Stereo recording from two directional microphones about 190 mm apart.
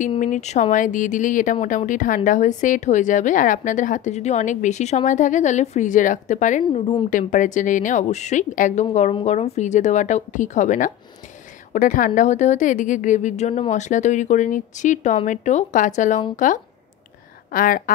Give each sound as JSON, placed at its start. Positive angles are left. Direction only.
{"t": 0.2, "sound": "speech", "side_deg": 40}
{"t": 7.1, "sound": "speech", "side_deg": 45}